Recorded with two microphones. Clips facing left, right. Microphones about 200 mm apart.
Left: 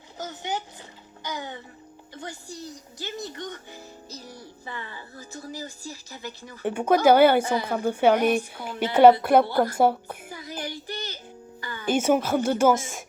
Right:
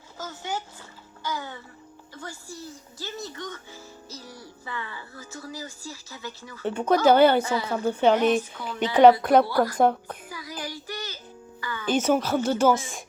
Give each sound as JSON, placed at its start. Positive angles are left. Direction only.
{"t": 0.2, "sound": "a woman's voice", "side_deg": 20}
{"t": 3.7, "sound": "music", "side_deg": 15}
{"t": 4.7, "sound": "a woman's voice", "side_deg": 40}
{"t": 6.6, "sound": "music", "side_deg": 15}
{"t": 8.6, "sound": "a woman's voice", "side_deg": 20}
{"t": 9.7, "sound": "music", "side_deg": 10}
{"t": 10.3, "sound": "child singing", "side_deg": 25}
{"t": 11.6, "sound": "music", "side_deg": 40}
{"t": 11.9, "sound": "music", "side_deg": 10}